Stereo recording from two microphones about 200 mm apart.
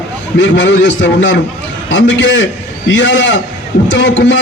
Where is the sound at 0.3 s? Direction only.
65° left (ahead or behind).